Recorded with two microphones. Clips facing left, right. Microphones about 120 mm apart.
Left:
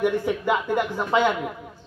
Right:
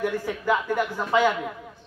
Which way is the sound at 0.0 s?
20° left (ahead or behind).